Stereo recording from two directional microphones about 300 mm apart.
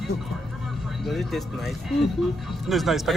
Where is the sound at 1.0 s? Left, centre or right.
Centre.